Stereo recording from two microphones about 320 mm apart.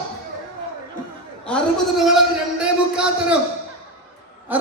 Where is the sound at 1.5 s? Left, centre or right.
Centre.